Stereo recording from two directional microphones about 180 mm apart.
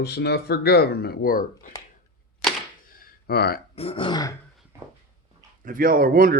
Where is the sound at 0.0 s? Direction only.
65° left (ahead or behind).